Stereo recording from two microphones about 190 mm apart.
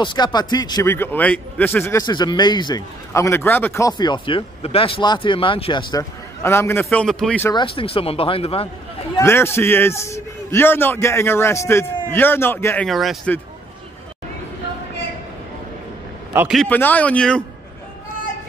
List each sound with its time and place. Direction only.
0.0 s a man's voice: 25° left (ahead or behind); by 7.4 s 5° left (ahead or behind)
7.4 s a man's voice: 25° left (ahead or behind)
9.2 s a man's voice: 15° left (ahead or behind)
12.8 s a man's voice: centre (ahead or behind)
16.3 s a man's voice: 5° right (ahead or behind)
16.6 s a man's voice: 10° left (ahead or behind)